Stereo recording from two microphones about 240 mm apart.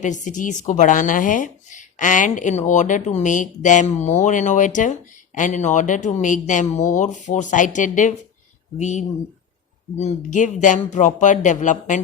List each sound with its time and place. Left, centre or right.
0.0 s speech: left